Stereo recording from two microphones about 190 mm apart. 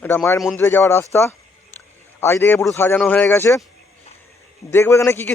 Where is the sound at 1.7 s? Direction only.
10° left (ahead or behind).